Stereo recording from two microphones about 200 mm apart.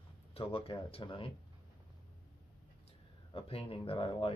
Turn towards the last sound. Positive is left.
turn(degrees=25)  # may be behind; listen again after turning